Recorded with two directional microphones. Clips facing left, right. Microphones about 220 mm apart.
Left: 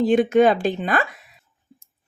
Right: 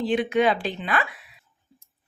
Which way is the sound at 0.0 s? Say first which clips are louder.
Left 6 dB; 45° left (ahead or behind).